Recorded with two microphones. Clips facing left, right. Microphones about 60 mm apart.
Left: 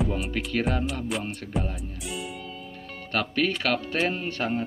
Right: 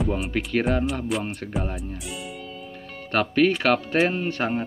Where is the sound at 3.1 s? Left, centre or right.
Right.